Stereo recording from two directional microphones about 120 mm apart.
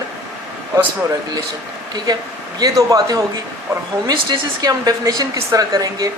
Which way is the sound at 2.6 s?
30° right (ahead or behind).